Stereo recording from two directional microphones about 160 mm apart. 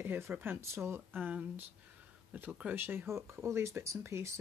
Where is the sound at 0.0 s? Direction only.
10° right (ahead or behind).